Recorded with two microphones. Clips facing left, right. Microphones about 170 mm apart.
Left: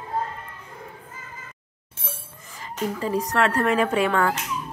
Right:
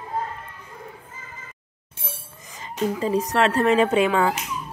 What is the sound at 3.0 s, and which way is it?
Speech, 20° right (ahead or behind).